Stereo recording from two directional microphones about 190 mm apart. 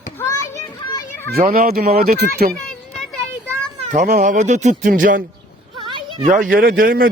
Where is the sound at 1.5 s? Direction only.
55° right (ahead or behind).